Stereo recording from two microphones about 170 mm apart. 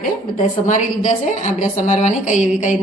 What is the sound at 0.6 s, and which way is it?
A woman's voice, 45° left (ahead or behind).